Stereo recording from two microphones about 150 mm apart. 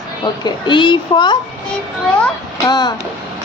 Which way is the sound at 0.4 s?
35° left (ahead or behind).